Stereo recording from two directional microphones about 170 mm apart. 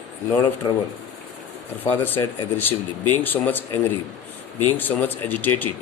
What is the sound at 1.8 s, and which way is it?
Speech, 10° left (ahead or behind).